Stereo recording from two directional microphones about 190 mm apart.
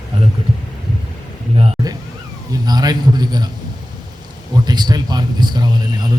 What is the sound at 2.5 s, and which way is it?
Speech, 20° right (ahead or behind).